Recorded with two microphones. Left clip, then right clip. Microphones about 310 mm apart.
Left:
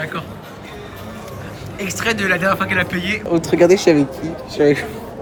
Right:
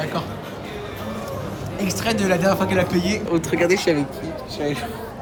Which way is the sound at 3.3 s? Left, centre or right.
Centre.